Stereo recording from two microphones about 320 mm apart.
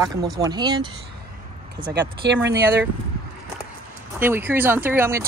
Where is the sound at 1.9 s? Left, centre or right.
Right.